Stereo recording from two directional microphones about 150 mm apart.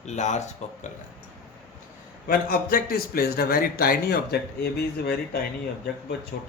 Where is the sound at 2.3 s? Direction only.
75° left (ahead or behind).